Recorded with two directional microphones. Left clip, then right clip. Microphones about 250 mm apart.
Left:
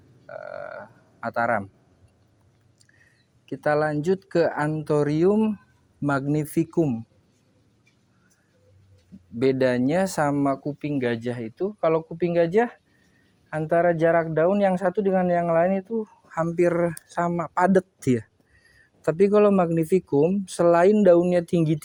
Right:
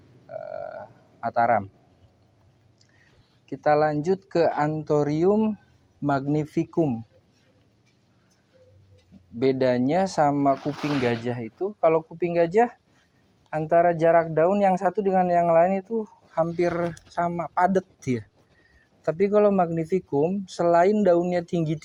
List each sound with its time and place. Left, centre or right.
0.3 s burping: left
3.4 s speech: left
9.4 s speech: left